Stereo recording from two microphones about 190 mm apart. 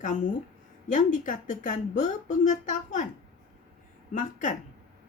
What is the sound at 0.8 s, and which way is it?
Speech, 40° left (ahead or behind).